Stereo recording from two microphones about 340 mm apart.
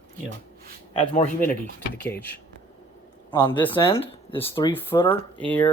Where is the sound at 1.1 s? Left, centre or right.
Left.